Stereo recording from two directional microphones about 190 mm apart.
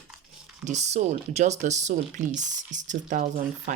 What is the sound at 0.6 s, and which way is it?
Speech, 35° right (ahead or behind).